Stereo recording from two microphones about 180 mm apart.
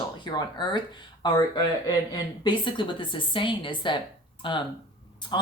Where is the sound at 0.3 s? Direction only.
25° left (ahead or behind).